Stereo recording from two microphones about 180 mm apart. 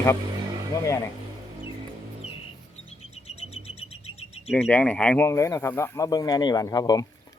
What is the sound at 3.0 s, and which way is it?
Bird, 35° left (ahead or behind).